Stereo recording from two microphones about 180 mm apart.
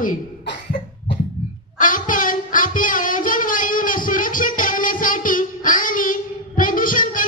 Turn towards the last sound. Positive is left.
turn(degrees=50)  # may be behind; listen again after turning